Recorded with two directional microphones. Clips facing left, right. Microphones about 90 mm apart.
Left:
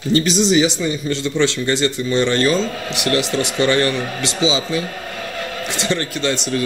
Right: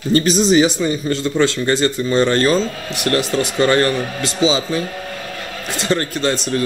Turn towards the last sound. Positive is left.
turn(degrees=-40)  # may be behind; listen again after turning